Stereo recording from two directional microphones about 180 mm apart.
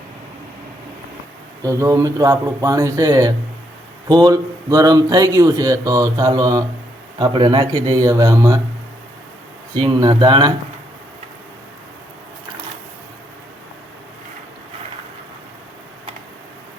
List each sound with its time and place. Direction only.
1.6 s speech: 15° right (ahead or behind)
9.7 s speech: 25° right (ahead or behind)